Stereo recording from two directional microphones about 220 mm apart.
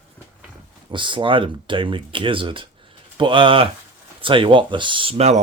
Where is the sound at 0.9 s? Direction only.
20° right (ahead or behind).